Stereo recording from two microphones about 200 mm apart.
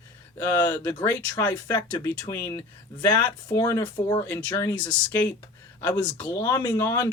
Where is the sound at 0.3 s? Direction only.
10° left (ahead or behind).